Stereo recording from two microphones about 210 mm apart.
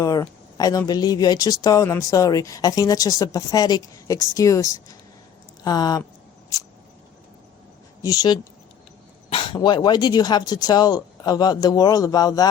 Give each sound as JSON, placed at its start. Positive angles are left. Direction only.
{"t": 0.0, "sound": "speech", "side_deg": 20}
{"t": 8.0, "sound": "speech", "side_deg": 15}